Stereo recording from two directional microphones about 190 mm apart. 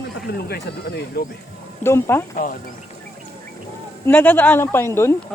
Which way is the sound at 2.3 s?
45° left (ahead or behind).